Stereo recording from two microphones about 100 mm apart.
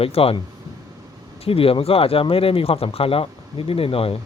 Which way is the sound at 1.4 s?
70° left (ahead or behind).